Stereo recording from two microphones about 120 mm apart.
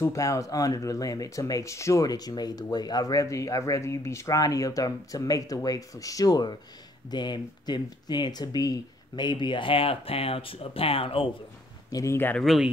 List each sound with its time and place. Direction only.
0.0 s speech: 25° left (ahead or behind); by 11.2 s 50° left (ahead or behind)
11.9 s speech: 25° left (ahead or behind)